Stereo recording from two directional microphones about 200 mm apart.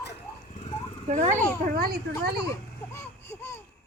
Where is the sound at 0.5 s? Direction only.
35° left (ahead or behind).